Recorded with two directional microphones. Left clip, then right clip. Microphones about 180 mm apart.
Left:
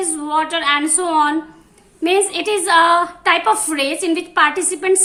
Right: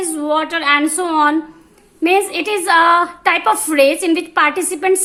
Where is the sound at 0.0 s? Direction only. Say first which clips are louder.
Right 1 dB; 35° right (ahead or behind).